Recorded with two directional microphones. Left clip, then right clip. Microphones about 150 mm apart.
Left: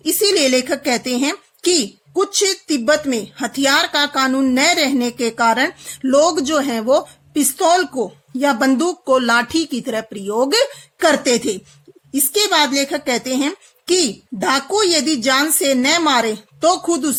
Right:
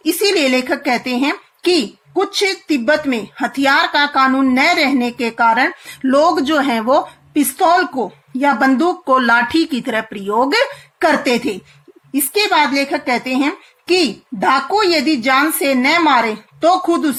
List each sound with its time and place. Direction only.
0.0 s a woman's voice: 50° left (ahead or behind)
7.3 s a woman's voice: 55° left (ahead or behind)